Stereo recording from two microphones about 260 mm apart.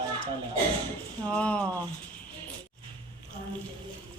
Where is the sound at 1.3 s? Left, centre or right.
Centre.